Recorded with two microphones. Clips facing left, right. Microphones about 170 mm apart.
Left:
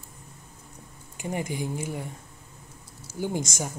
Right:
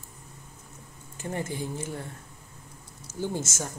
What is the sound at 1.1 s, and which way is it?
Speech, 15° left (ahead or behind).